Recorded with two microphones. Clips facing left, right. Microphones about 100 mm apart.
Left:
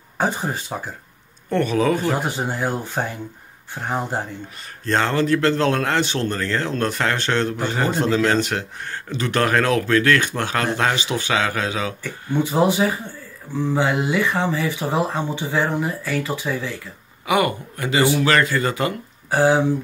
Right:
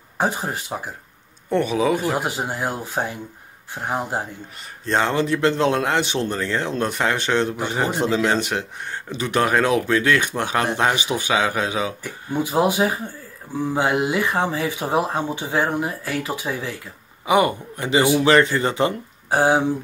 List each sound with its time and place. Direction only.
0.2 s speech: centre (ahead or behind)
4.8 s a man's voice: 15° right (ahead or behind)